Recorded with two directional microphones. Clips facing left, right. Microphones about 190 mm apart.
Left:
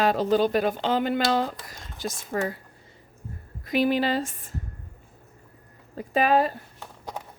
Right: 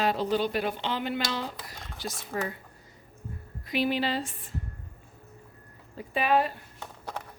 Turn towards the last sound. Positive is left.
turn(degrees=15)  # may be behind; listen again after turning